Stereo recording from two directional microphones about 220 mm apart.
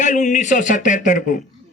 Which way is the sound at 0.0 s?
35° left (ahead or behind).